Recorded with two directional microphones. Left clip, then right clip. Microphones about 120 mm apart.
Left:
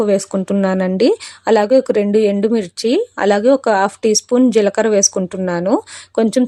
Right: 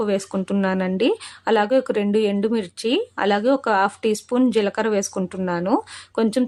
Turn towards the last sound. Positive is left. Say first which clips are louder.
# left 6 dB
turn(degrees=40)  # may be behind; listen again after turning